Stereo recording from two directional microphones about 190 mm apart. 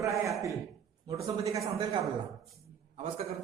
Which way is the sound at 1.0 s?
15° right (ahead or behind).